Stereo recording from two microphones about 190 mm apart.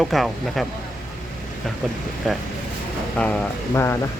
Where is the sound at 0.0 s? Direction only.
Centre (ahead or behind).